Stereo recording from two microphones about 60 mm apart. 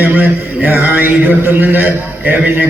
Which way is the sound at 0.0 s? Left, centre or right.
Right.